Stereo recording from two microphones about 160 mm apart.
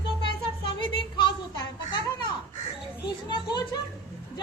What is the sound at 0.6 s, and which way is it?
Children playing, 30° left (ahead or behind).